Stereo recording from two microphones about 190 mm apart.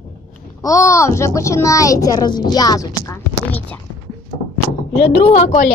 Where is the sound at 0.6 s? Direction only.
15° left (ahead or behind).